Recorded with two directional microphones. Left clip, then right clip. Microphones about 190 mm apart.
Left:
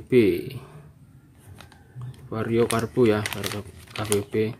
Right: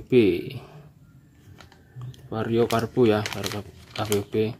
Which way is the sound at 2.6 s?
5° left (ahead or behind).